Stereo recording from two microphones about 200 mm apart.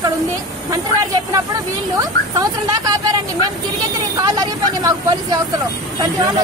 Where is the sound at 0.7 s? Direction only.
15° right (ahead or behind).